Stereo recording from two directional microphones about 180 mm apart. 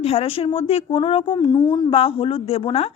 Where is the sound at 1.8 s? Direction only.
30° left (ahead or behind).